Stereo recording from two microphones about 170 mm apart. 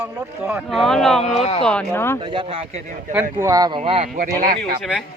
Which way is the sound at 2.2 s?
30° right (ahead or behind).